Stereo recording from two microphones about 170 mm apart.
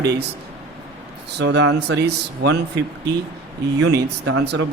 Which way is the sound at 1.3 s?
90° right.